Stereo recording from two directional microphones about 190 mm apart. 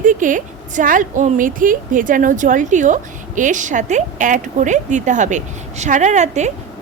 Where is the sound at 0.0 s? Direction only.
45° right (ahead or behind).